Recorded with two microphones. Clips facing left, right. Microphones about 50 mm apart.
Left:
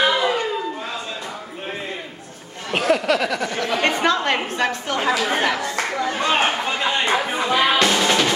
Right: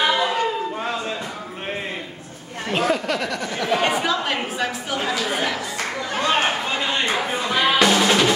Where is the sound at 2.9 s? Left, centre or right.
Left.